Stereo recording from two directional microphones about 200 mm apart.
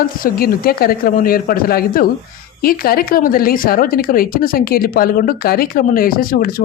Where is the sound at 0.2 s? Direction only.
50° left (ahead or behind).